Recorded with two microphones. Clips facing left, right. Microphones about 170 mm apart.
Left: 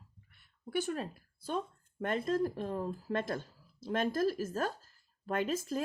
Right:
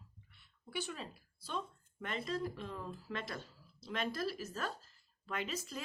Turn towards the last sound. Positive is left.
turn(degrees=50)  # may be behind; listen again after turning